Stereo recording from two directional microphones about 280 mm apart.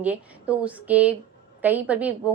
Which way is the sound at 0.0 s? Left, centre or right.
Centre.